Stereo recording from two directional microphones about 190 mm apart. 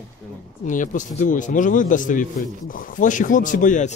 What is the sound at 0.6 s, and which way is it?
A man's voice, 40° left (ahead or behind).